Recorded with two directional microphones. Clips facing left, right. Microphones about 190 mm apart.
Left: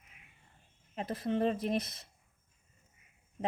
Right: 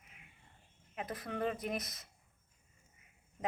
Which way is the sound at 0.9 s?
30° left (ahead or behind).